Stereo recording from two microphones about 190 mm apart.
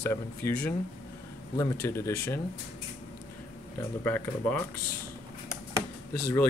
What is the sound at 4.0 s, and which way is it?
Speech, 10° left (ahead or behind).